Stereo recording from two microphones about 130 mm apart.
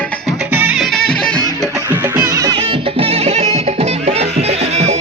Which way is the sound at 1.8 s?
15° right (ahead or behind).